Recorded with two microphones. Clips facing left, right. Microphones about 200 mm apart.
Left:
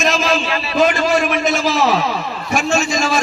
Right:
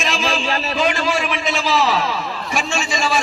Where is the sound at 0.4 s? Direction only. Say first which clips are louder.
Even; 40° right (ahead or behind).